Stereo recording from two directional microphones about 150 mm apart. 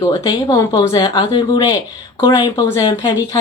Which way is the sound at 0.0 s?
25° left (ahead or behind).